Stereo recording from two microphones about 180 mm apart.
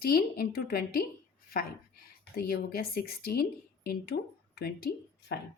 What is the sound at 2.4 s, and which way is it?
A woman's voice, 60° left (ahead or behind).